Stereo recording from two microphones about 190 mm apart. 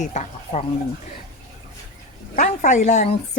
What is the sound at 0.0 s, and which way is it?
Speech, 40° left (ahead or behind).